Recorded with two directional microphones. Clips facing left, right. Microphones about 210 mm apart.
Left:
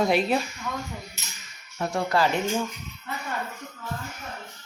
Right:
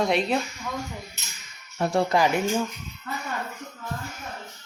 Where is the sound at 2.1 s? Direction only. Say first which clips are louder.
Even; 20° right (ahead or behind).